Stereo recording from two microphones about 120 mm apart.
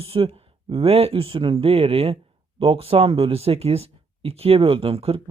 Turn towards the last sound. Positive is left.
turn(degrees=-50)  # may be behind; listen again after turning